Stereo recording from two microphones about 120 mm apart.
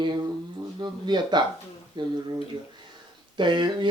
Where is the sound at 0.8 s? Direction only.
35° right (ahead or behind).